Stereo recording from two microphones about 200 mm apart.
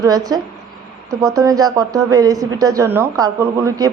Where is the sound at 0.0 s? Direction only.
15° right (ahead or behind).